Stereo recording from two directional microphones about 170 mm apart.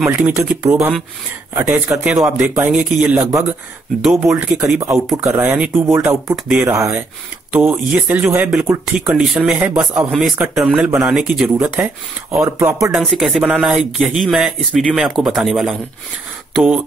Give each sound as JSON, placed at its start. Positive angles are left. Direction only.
{"t": 0.0, "sound": "speech", "side_deg": -10}
{"t": 3.2, "sound": "speech", "side_deg": -20}
{"t": 4.0, "sound": "speech", "side_deg": -5}
{"t": 7.5, "sound": "speech", "side_deg": -5}
{"t": 12.9, "sound": "speech", "side_deg": 0}